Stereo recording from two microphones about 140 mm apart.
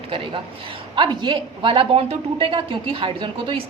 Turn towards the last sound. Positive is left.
turn(degrees=-40)  # may be behind; listen again after turning